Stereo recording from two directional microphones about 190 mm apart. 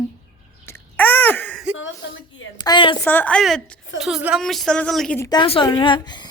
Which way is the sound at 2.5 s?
25° left (ahead or behind).